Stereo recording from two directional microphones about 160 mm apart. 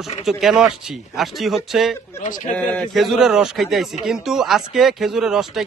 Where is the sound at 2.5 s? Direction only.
5° left (ahead or behind).